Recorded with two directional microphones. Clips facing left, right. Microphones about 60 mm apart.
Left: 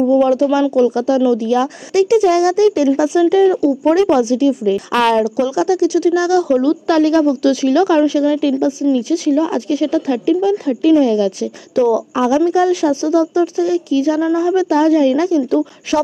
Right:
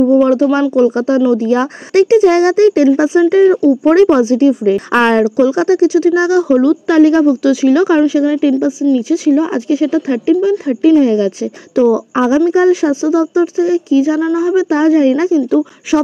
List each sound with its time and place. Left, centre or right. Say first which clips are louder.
0.1 s a woman's voice: right 2 dB; right